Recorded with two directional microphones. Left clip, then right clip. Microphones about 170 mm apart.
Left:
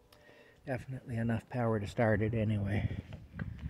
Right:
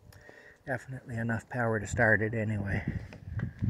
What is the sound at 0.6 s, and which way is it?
Speech, 20° left (ahead or behind).